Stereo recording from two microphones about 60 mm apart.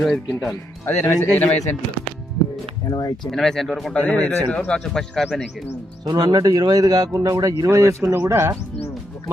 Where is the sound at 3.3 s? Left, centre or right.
Centre.